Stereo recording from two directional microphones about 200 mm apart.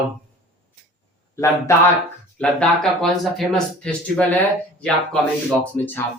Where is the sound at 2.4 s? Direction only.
5° left (ahead or behind).